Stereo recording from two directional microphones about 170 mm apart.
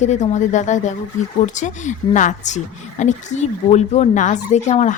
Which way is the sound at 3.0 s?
40° left (ahead or behind).